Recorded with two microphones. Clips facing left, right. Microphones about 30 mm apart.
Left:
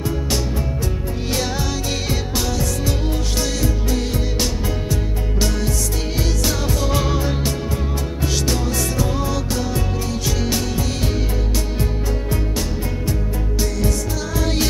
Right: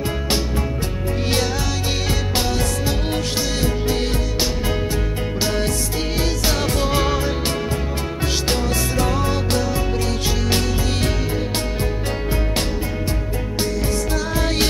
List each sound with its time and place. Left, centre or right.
2.3 s music: right
6.1 s music: centre
8.2 s music: right
9.6 s music: right
10.9 s music: right
13.7 s music: right